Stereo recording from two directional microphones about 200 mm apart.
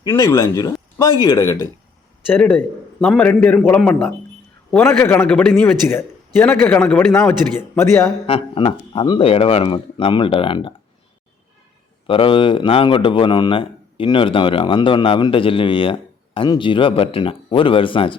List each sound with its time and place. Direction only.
0.0 s a man's voice: 15° left (ahead or behind)
8.3 s a man's voice: 25° left (ahead or behind)
12.0 s a man's voice: 25° left (ahead or behind)